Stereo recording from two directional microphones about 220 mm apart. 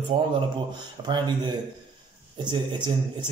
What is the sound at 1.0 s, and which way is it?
Speech, 20° right (ahead or behind).